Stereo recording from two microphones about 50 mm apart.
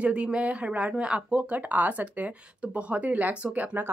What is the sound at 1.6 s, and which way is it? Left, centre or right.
Speech, right.